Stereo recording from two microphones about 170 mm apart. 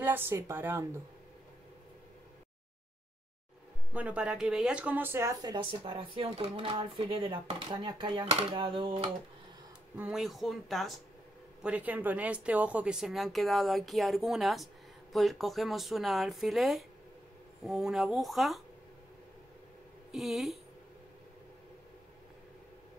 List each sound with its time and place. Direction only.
0.0 s speech: 15° right (ahead or behind)
3.9 s speech: 10° right (ahead or behind); by 9.1 s 30° right (ahead or behind)
9.9 s speech: 5° right (ahead or behind)
20.1 s speech: centre (ahead or behind)